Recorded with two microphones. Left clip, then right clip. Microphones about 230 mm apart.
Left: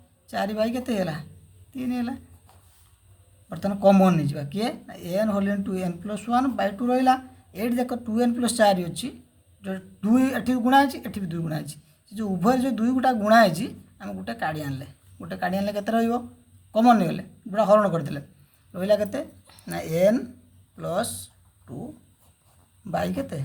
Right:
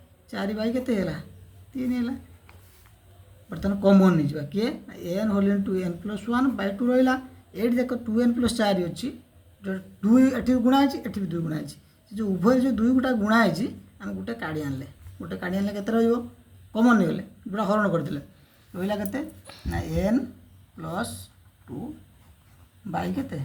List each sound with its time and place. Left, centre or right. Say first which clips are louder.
0.3 s speech: left 4 dB; left
3.5 s speech: left 2 dB; left
22.9 s speech: left 3 dB; left